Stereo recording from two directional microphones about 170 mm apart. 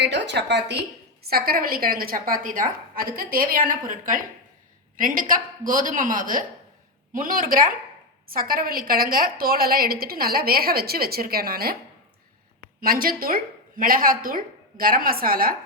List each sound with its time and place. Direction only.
0.0 s a woman's voice: 90° right; by 11.8 s 60° right (ahead or behind)
12.8 s a woman's voice: 60° right (ahead or behind)